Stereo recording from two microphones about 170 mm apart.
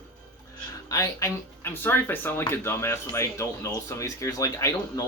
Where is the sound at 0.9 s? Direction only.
20° left (ahead or behind).